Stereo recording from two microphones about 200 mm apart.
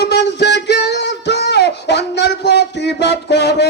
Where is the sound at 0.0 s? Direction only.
55° left (ahead or behind).